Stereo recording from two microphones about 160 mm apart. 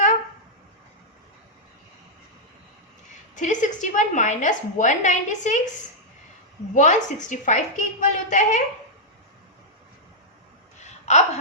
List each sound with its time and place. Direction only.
3.3 s a woman's voice: 50° left (ahead or behind)
6.7 s a woman's voice: 50° left (ahead or behind)
10.8 s a sound: 45° left (ahead or behind)